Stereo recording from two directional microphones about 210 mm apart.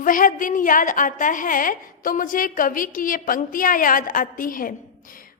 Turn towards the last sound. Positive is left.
turn(degrees=40)  # may be behind; listen again after turning